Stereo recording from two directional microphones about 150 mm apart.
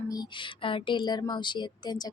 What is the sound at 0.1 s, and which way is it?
Speech, 30° left (ahead or behind).